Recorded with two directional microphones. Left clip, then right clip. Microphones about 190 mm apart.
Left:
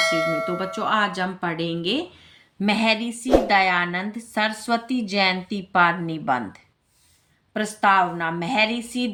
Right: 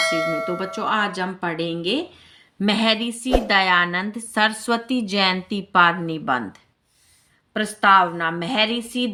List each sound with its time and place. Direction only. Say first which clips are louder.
0.0 s speech: even; centre (ahead or behind)
2.6 s a woman's voice: right 1 dB; 20° right (ahead or behind)